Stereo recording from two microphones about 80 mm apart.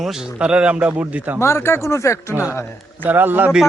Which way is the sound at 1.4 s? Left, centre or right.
Left.